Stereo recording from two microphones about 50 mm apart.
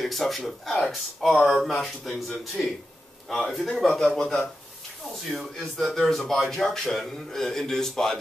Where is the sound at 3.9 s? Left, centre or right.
Centre.